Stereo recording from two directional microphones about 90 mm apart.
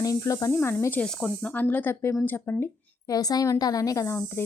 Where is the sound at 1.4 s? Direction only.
20° left (ahead or behind).